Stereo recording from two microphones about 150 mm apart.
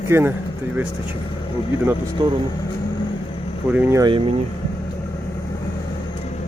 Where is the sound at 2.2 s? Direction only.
30° right (ahead or behind).